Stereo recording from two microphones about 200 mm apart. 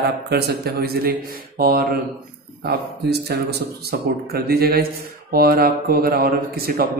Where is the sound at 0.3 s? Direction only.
55° right (ahead or behind).